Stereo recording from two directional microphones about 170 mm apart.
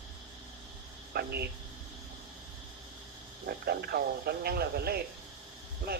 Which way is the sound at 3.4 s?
65° right (ahead or behind).